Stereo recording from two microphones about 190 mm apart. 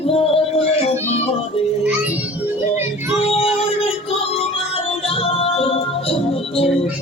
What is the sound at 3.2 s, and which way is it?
Music, 30° left (ahead or behind).